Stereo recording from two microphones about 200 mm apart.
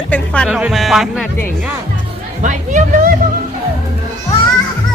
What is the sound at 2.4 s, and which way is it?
Speech, 40° right (ahead or behind).